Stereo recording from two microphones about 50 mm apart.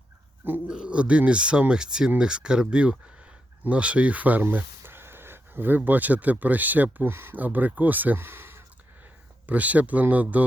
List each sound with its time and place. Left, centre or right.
0.7 s speech: centre
4.8 s a sound: right
6.4 s speech: right
7.1 s speech: right
7.3 s speech: right
8.2 s a sound: right
9.5 s speech: right